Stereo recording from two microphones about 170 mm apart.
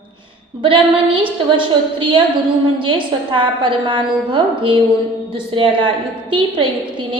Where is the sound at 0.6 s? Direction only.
30° right (ahead or behind).